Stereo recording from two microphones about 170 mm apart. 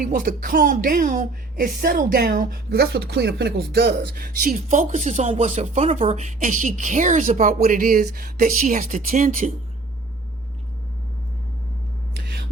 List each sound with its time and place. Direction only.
0.0 s speech: 50° right (ahead or behind)
12.1 s hum: 70° right (ahead or behind)